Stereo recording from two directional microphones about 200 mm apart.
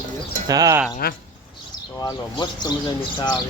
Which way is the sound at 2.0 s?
20° left (ahead or behind).